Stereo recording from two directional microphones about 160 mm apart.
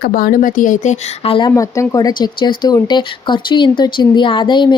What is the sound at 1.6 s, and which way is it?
Speech, 20° left (ahead or behind).